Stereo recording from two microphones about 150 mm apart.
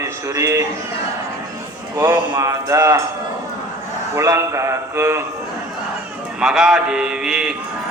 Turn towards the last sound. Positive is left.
turn(degrees=-5)  # may be behind; listen again after turning